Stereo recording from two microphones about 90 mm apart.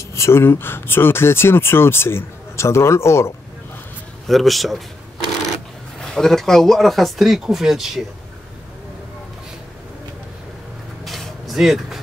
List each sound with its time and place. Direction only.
0.1 s speech: 30° left (ahead or behind)
4.3 s speech: centre (ahead or behind)
5.9 s speech: 5° left (ahead or behind)
11.1 s a sound: centre (ahead or behind)